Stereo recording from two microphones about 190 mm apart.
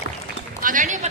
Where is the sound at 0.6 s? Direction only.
45° right (ahead or behind).